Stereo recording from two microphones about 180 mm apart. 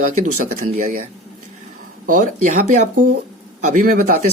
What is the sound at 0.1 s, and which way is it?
Speech, 45° right (ahead or behind).